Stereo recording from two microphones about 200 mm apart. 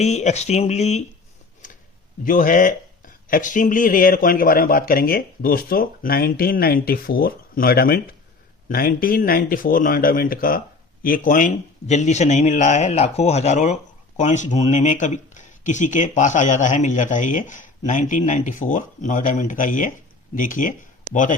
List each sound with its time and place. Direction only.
0.0 s speech: 35° left (ahead or behind)
1.6 s a sound: 40° left (ahead or behind)
2.2 s a man's voice: 45° left (ahead or behind)